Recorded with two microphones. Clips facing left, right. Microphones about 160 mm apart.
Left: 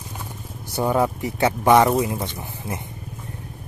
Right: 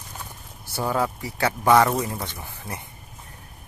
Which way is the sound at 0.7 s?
20° left (ahead or behind).